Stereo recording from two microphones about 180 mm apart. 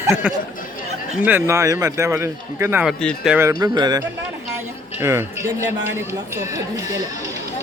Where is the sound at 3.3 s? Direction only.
15° right (ahead or behind).